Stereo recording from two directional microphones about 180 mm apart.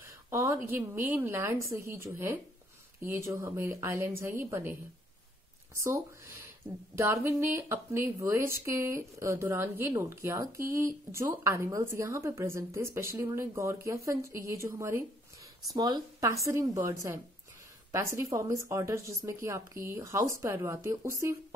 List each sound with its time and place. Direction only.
0.3 s speech: 15° right (ahead or behind)
5.8 s speech: 15° right (ahead or behind)